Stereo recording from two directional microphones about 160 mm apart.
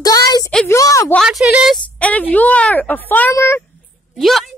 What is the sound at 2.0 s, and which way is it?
Speech, 10° left (ahead or behind).